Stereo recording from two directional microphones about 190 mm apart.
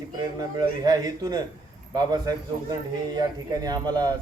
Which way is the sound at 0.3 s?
20° right (ahead or behind).